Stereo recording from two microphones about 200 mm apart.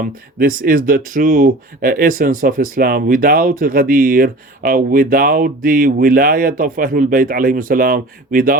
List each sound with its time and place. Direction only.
0.0 s speech: 45° right (ahead or behind)